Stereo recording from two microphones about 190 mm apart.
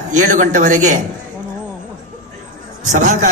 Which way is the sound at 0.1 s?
40° right (ahead or behind).